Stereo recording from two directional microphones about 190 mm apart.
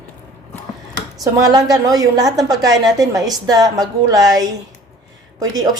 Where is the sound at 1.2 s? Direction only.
20° right (ahead or behind).